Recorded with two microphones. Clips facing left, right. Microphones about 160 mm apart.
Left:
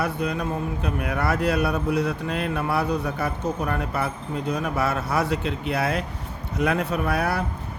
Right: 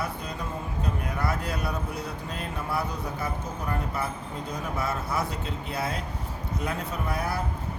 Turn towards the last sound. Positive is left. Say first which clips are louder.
# left 6 dB
turn(degrees=70)  # may be behind; listen again after turning